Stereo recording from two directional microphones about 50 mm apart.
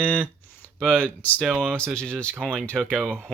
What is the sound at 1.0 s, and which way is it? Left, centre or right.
Speech, left.